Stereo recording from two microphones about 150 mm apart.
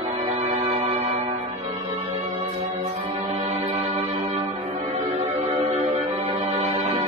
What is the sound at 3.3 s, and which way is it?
Music, 40° right (ahead or behind).